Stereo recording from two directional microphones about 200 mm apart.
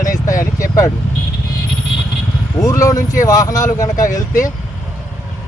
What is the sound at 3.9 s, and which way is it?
Speech, 40° left (ahead or behind).